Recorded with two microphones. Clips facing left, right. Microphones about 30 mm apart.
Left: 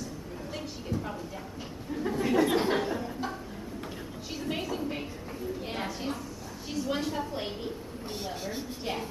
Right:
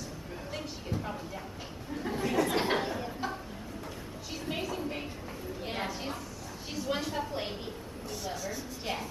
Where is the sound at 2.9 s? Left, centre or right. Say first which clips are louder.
Left 2 dB; centre.